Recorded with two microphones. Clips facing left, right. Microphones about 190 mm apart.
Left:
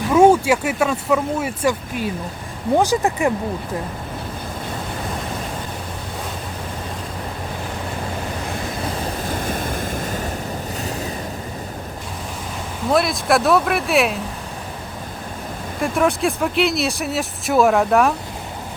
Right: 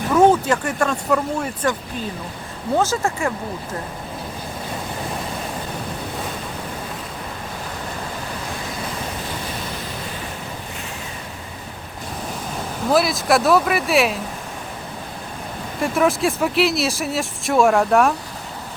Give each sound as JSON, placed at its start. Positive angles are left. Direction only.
{"t": 0.1, "sound": "speech", "side_deg": 10}
{"t": 9.5, "sound": "waves", "side_deg": 50}
{"t": 12.9, "sound": "speech", "side_deg": 0}
{"t": 15.8, "sound": "speech", "side_deg": 0}